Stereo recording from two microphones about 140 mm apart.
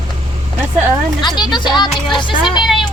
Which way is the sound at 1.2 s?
30° left (ahead or behind).